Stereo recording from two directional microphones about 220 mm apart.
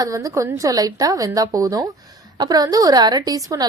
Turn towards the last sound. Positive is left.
turn(degrees=-15)  # may be behind; listen again after turning